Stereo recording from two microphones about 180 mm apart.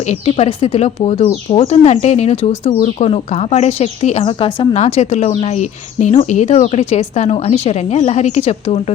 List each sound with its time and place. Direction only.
0.0 s speech: 35° left (ahead or behind)